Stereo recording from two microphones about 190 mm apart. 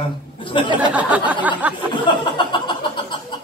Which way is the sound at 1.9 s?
25° left (ahead or behind).